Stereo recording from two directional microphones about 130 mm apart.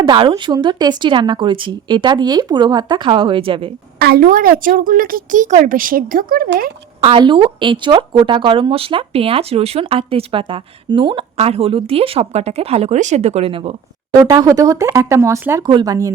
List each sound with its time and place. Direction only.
0.0 s a woman's voice: 40° right (ahead or behind)
4.2 s speech: 90° right
7.0 s speech: 40° right (ahead or behind)
11.3 s speech: 50° right (ahead or behind)
14.2 s speech: 30° right (ahead or behind)
15.6 s speech: 30° right (ahead or behind)